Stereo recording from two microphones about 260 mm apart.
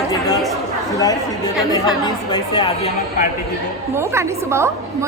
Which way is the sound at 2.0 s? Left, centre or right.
Centre.